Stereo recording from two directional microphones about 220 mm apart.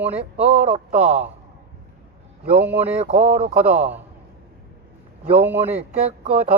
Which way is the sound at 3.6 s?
5° right (ahead or behind).